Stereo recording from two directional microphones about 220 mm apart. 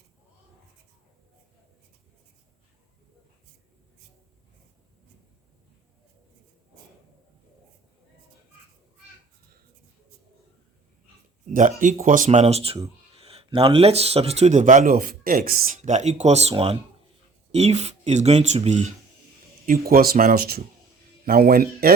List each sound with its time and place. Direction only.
11.8 s speech: 40° right (ahead or behind)
19.6 s speech: 40° right (ahead or behind)